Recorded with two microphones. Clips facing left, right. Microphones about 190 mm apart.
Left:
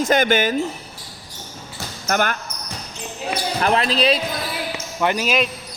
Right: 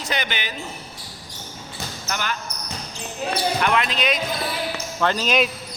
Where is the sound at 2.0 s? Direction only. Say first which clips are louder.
Left 8 dB; 50° left (ahead or behind).